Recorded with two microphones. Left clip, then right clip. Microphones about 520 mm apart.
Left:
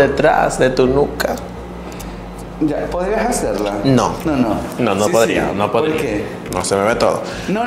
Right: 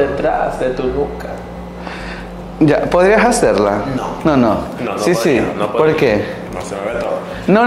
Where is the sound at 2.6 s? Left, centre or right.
Right.